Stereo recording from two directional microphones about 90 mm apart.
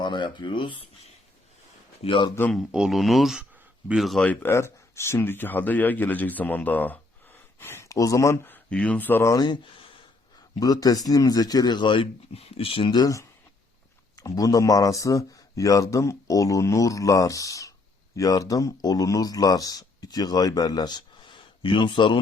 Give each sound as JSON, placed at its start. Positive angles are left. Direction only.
{"t": 0.0, "sound": "speech", "side_deg": 60}
{"t": 2.0, "sound": "speech", "side_deg": 70}
{"t": 2.7, "sound": "speech", "side_deg": -5}
{"t": 4.4, "sound": "speech", "side_deg": 30}
{"t": 8.4, "sound": "speech", "side_deg": 15}
{"t": 9.2, "sound": "speech", "side_deg": 40}
{"t": 9.5, "sound": "a sound", "side_deg": 75}
{"t": 10.6, "sound": "speech", "side_deg": 45}
{"t": 12.9, "sound": "speech", "side_deg": 45}